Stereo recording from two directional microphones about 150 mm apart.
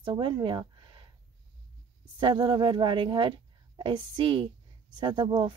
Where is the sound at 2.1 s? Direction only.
30° right (ahead or behind).